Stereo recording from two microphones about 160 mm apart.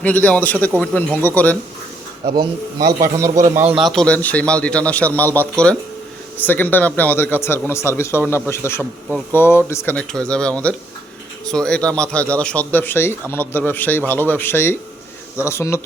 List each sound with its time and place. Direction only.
0.0 s speech: 10° left (ahead or behind)
2.3 s speech: 25° right (ahead or behind)
3.7 s speech: centre (ahead or behind); by 15.8 s 15° left (ahead or behind)